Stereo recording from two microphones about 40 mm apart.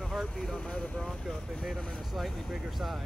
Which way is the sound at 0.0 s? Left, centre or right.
Centre.